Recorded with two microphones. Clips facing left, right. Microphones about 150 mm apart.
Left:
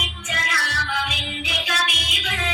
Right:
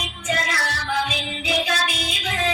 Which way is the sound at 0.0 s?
35° right (ahead or behind).